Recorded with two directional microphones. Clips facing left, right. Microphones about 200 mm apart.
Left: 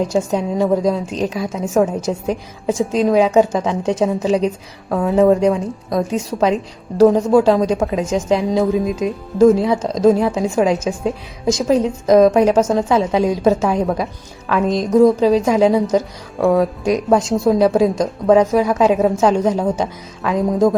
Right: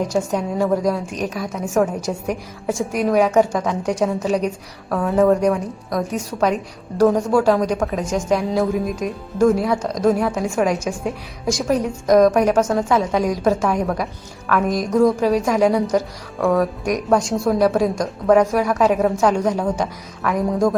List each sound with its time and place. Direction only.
0.1 s a woman's voice: 25° left (ahead or behind)